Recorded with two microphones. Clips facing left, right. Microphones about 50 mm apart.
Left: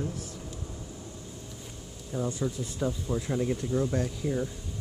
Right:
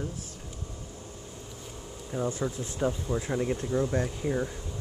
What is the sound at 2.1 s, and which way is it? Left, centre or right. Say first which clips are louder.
Speech: right 1 dB; right.